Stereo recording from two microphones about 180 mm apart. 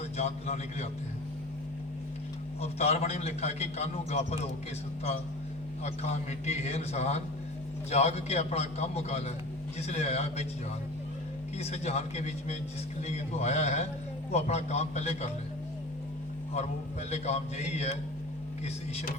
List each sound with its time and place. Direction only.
0.2 s a man's voice: 35° left (ahead or behind)
2.6 s a man's voice: 35° left (ahead or behind)
5.8 s a man's voice: 35° left (ahead or behind)
11.5 s a man's voice: 35° left (ahead or behind)
17.1 s a man's voice: 35° left (ahead or behind)